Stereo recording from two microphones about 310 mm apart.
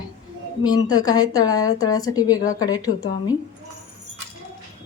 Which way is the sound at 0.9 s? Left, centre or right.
Centre.